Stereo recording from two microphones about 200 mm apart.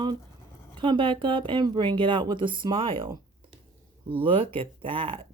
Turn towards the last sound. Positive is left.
turn(degrees=-25)  # may be behind; listen again after turning